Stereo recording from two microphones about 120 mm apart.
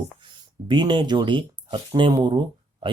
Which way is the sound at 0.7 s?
40° right (ahead or behind).